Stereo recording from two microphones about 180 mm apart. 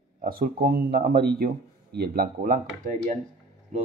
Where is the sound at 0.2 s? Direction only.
55° right (ahead or behind).